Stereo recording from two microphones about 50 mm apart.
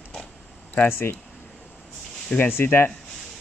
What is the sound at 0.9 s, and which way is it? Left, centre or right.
Speech, left.